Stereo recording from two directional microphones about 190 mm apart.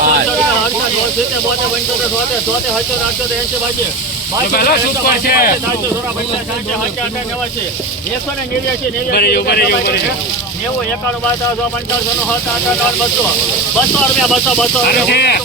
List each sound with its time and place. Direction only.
4.5 s speech: 55° left (ahead or behind)
9.1 s speech: 55° left (ahead or behind)
13.7 s speech: centre (ahead or behind)
15.1 s speech: 60° left (ahead or behind)